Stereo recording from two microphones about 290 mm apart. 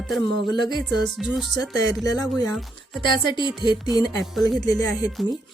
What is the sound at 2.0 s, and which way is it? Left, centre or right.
Music, centre.